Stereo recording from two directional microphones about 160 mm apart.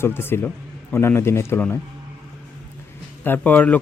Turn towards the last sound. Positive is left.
turn(degrees=10)  # may be behind; listen again after turning